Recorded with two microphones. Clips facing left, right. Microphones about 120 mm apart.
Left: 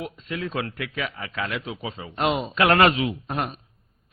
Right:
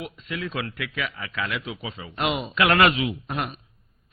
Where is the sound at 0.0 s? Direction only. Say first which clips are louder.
Left 2 dB; 35° left (ahead or behind).